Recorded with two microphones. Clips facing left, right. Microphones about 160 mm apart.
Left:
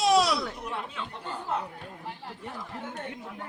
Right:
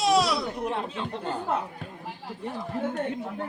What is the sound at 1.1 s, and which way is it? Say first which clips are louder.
Speech: right 6 dB; 65° right (ahead or behind).